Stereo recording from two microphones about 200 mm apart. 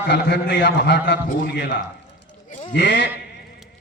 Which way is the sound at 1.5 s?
60° left (ahead or behind).